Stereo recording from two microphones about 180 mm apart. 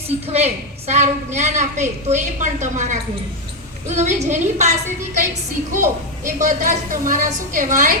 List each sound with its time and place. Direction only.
0.3 s a woman's voice: 35° right (ahead or behind)
5.7 s a woman's voice: 45° right (ahead or behind)